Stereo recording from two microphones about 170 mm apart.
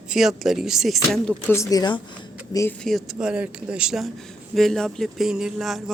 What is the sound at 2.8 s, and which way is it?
A woman's voice, centre (ahead or behind).